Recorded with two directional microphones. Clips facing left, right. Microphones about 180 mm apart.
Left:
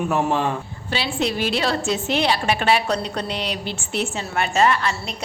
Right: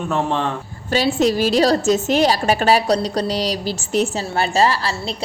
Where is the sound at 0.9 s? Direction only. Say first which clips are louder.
Right 7 dB; 40° right (ahead or behind).